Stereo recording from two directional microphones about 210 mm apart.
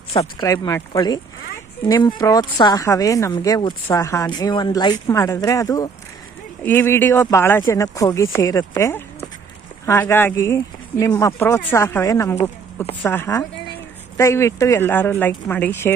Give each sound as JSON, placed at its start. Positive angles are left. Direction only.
{"t": 0.1, "sound": "speech", "side_deg": 25}
{"t": 0.4, "sound": "speech", "side_deg": 15}